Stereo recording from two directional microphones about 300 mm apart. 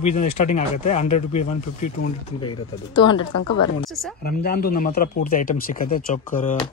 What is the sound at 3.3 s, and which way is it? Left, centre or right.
Speech, left.